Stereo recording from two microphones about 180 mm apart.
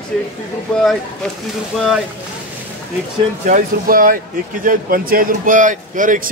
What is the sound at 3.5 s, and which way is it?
A man's voice, 50° right (ahead or behind).